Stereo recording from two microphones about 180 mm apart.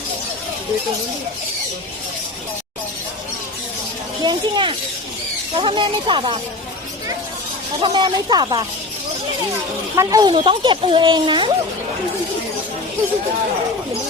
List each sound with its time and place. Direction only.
4.2 s speech: 25° right (ahead or behind)
7.8 s speech: 25° right (ahead or behind)
9.9 s speech: 20° right (ahead or behind)